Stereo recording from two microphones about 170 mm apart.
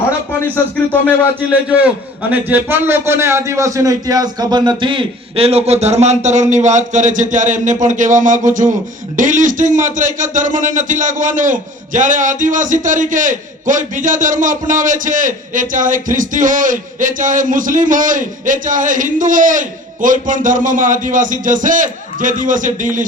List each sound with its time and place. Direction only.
0.5 s speech: 10° left (ahead or behind)
1.5 s a man's voice: 5° right (ahead or behind); by 23.0 s 50° right (ahead or behind)